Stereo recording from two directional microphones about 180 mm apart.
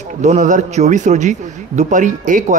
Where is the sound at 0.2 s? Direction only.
40° right (ahead or behind).